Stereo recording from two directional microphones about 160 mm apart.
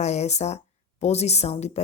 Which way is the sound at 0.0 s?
45° left (ahead or behind).